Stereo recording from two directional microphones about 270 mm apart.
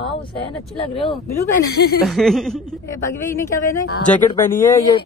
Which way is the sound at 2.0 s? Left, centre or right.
Centre.